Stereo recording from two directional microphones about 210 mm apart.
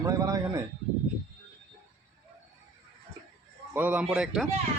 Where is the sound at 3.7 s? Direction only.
5° right (ahead or behind).